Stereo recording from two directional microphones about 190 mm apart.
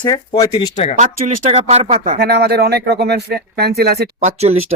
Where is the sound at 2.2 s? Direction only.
60° right (ahead or behind).